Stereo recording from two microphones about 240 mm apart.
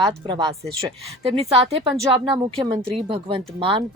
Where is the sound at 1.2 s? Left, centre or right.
Right.